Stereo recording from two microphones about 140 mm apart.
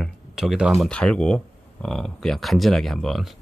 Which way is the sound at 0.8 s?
5° left (ahead or behind).